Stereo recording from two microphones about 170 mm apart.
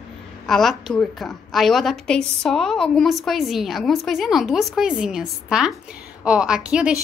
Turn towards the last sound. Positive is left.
turn(degrees=-5)  # may be behind; listen again after turning